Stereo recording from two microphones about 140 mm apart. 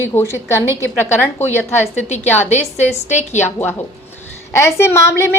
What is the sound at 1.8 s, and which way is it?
A woman's voice, 55° left (ahead or behind).